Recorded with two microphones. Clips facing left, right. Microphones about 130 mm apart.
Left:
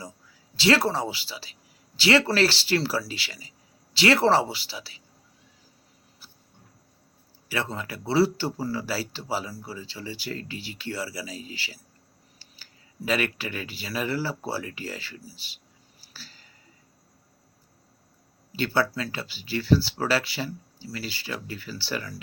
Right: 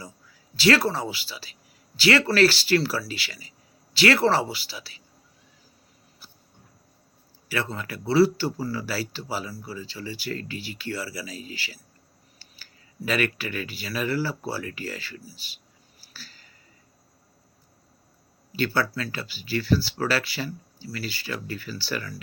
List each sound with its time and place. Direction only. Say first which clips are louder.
0.5 s speech: right 1 dB; 25° left (ahead or behind)
7.4 s speech: right 1 dB; 25° left (ahead or behind)
13.1 s speech: right 1 dB; 20° left (ahead or behind)
16.0 s a sound: right 1 dB; 25° left (ahead or behind)
18.5 s speech: even; 25° left (ahead or behind)